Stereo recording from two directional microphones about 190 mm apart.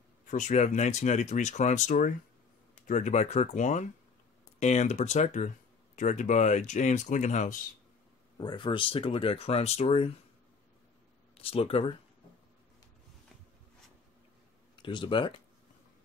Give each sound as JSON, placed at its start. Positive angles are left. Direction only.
{"t": 0.3, "sound": "speech", "side_deg": 40}
{"t": 8.4, "sound": "speech", "side_deg": 25}
{"t": 11.4, "sound": "speech", "side_deg": 30}
{"t": 14.8, "sound": "speech", "side_deg": 25}